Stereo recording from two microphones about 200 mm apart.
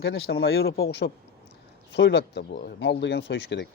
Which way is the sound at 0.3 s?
55° left (ahead or behind).